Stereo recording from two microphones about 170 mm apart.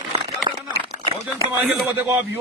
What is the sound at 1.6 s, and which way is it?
Speech, 10° right (ahead or behind).